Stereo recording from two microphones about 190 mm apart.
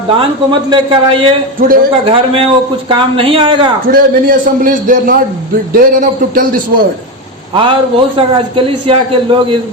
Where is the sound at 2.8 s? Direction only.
30° right (ahead or behind).